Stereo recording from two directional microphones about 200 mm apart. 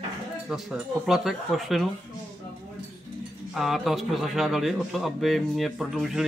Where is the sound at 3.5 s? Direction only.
Centre (ahead or behind).